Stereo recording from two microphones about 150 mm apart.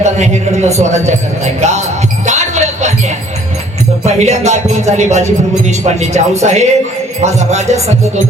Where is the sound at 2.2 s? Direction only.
50° right (ahead or behind).